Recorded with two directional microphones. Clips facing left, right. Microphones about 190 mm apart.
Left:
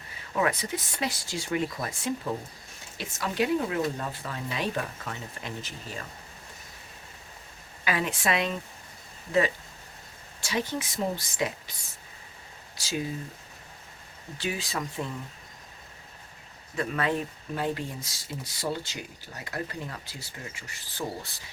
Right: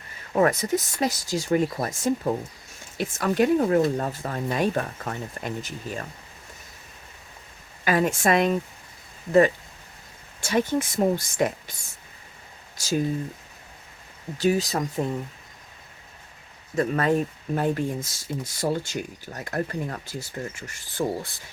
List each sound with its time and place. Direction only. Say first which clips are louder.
0.3 s speech: right 7 dB; 45° right (ahead or behind)
7.9 s speech: right 7 dB; 45° right (ahead or behind)
10.4 s speech: right 7 dB; 50° right (ahead or behind)
12.7 s speech: right 7 dB; 45° right (ahead or behind)
14.3 s speech: right 10 dB; 40° right (ahead or behind)
16.7 s speech: right 6 dB; 40° right (ahead or behind)